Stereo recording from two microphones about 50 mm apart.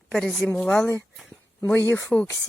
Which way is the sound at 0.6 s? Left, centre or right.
Centre.